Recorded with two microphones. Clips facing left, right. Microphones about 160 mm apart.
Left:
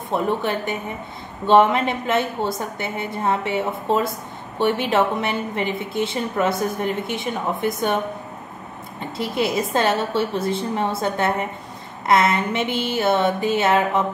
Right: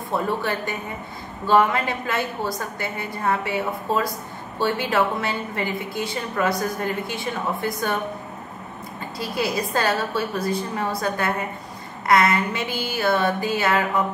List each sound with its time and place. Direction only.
0.1 s a woman's voice: 20° left (ahead or behind)
9.2 s a woman's voice: 25° left (ahead or behind)